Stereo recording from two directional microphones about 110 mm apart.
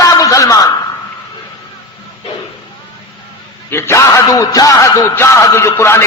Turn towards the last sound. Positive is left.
turn(degrees=25)  # may be behind; listen again after turning